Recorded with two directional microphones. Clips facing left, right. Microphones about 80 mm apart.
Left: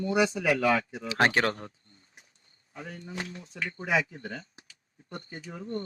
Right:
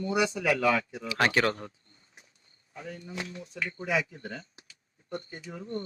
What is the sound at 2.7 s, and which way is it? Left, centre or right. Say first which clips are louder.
Speech: even; left.